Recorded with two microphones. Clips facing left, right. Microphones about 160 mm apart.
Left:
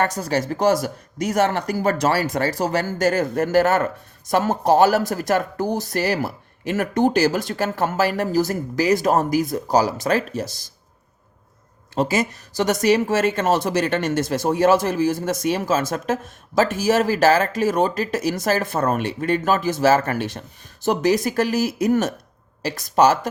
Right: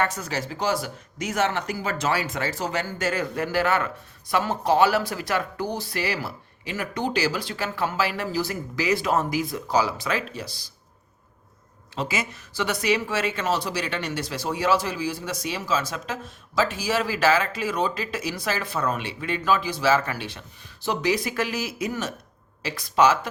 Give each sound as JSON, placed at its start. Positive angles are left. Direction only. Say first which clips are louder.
{"t": 0.0, "sound": "speech", "louder": "left 5 dB", "side_deg": 40}
{"t": 11.9, "sound": "speech", "louder": "left 8 dB", "side_deg": 40}